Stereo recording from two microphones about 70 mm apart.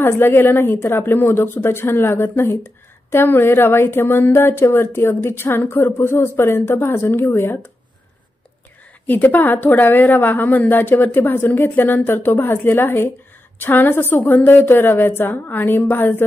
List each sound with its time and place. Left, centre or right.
0.0 s speech: left
9.0 s a woman's voice: left